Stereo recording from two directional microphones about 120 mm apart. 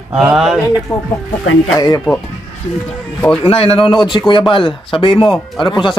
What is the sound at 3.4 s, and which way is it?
Speech, 55° left (ahead or behind).